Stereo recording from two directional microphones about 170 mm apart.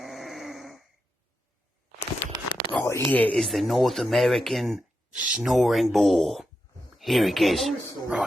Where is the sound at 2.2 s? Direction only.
90° left.